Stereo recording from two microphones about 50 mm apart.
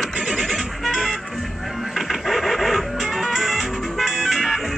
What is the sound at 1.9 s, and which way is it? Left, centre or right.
Music, centre.